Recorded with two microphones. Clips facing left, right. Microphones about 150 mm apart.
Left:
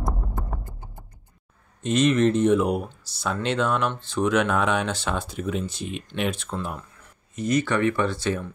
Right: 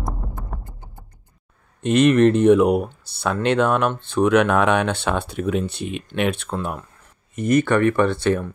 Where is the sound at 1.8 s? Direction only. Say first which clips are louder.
Right 5 dB; 65° right (ahead or behind).